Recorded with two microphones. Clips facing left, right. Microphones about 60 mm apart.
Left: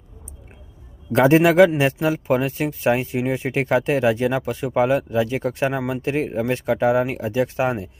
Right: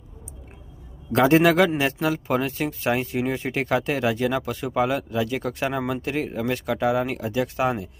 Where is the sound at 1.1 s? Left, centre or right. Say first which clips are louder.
Left 3 dB; left.